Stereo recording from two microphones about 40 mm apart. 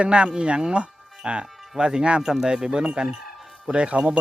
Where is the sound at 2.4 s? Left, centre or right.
Right.